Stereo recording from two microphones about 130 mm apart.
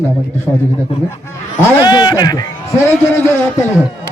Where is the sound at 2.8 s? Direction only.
20° left (ahead or behind).